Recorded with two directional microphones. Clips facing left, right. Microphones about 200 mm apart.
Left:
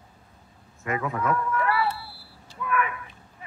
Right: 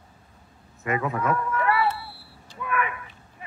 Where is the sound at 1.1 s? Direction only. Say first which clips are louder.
Even; 25° right (ahead or behind).